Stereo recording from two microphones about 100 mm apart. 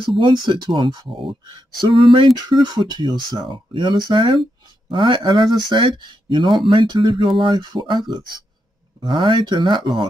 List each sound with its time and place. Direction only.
0.2 s speech: 50° right (ahead or behind)